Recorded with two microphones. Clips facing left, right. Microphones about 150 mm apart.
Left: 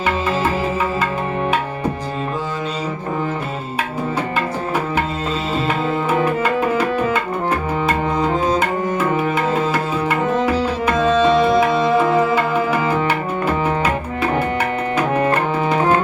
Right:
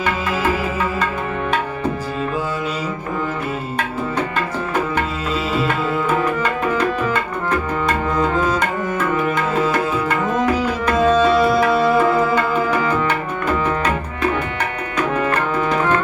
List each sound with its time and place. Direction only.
11.0 s tabla: 10° right (ahead or behind)
15.2 s music: 30° left (ahead or behind)